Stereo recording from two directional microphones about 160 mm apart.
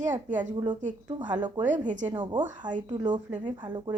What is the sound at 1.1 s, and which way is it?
Speech, 25° right (ahead or behind).